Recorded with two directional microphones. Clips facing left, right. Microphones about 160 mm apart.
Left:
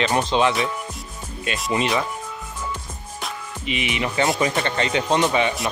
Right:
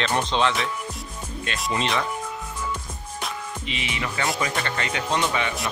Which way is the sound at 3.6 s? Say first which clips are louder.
Left 7 dB; 15° left (ahead or behind).